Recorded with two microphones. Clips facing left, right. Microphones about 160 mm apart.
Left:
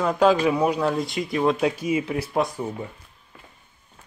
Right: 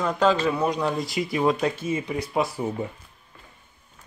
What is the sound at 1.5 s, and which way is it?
Speech, 10° left (ahead or behind).